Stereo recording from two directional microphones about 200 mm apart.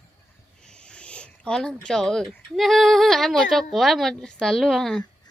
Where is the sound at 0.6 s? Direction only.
5° left (ahead or behind).